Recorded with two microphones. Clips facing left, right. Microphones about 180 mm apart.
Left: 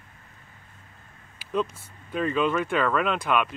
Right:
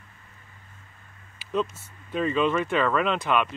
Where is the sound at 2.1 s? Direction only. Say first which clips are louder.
Right 1 dB; centre (ahead or behind).